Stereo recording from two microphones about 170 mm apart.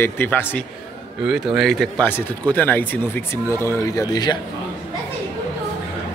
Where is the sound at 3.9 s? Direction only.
25° left (ahead or behind).